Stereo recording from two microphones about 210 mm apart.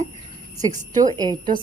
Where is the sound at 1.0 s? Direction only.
20° right (ahead or behind).